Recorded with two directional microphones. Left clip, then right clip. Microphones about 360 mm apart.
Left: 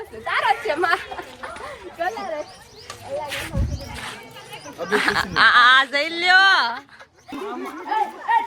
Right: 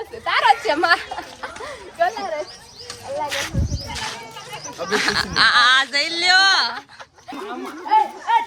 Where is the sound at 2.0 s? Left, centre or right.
Right.